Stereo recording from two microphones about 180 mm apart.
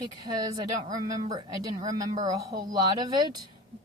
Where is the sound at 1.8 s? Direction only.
20° right (ahead or behind).